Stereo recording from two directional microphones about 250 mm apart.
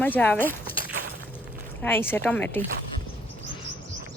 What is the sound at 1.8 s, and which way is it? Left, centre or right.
Speech, centre.